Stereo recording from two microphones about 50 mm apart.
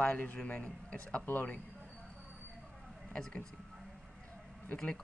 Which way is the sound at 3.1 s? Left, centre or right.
Left.